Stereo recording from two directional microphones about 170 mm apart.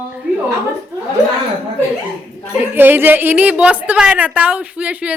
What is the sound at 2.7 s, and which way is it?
A woman's voice, 10° right (ahead or behind).